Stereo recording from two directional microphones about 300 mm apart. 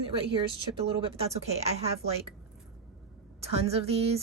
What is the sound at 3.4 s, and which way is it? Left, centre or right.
Speech, centre.